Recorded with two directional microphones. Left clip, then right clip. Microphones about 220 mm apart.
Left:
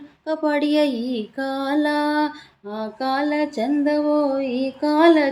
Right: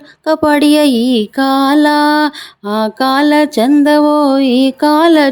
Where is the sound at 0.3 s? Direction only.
50° right (ahead or behind).